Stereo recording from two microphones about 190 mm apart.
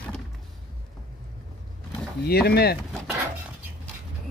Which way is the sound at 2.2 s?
55° left (ahead or behind).